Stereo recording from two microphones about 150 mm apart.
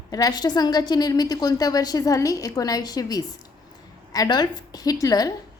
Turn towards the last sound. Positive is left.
turn(degrees=25)  # may be behind; listen again after turning